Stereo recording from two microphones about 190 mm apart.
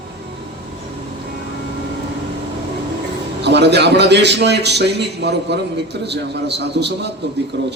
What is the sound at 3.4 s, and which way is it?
A man's voice, 65° right (ahead or behind).